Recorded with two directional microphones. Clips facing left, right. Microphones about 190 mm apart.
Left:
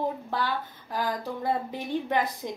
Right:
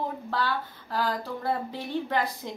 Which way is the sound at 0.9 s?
15° left (ahead or behind).